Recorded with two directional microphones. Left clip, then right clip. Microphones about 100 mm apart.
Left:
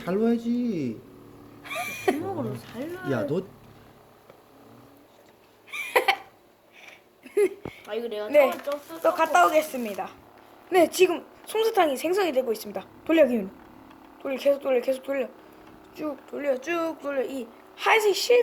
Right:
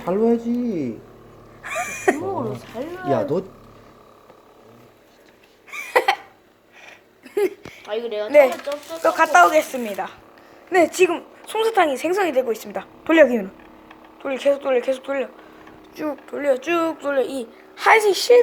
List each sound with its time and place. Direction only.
0.0 s speech: 65° left (ahead or behind)
0.3 s speech: 45° left (ahead or behind)
1.6 s a sound: centre (ahead or behind)
2.2 s a woman's voice: 35° left (ahead or behind)
5.7 s a sound: centre (ahead or behind)
7.3 s a sound: 5° left (ahead or behind)
7.9 s speech: 40° left (ahead or behind)
8.7 s a woman's voice: 25° left (ahead or behind)
9.1 s speech: 5° right (ahead or behind)
10.7 s a woman's voice: 15° left (ahead or behind)
12.1 s speech: centre (ahead or behind)
12.7 s a woman's voice: 10° left (ahead or behind); by 15.3 s 35° left (ahead or behind)
16.0 s speech: 5° right (ahead or behind)
16.6 s a woman's voice: 25° right (ahead or behind)